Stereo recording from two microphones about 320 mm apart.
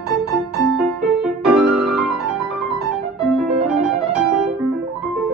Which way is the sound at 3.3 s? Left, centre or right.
Centre.